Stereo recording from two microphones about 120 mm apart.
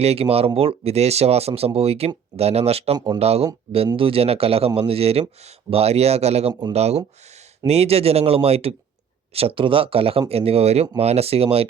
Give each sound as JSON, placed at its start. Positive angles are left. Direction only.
{"t": 0.0, "sound": "speech", "side_deg": -55}
{"t": 6.5, "sound": "speech", "side_deg": -35}
{"t": 6.7, "sound": "speech", "side_deg": -65}